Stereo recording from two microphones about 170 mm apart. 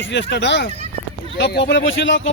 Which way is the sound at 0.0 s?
90° left.